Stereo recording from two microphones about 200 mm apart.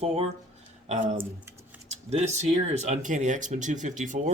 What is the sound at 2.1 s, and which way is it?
Speech, 35° right (ahead or behind).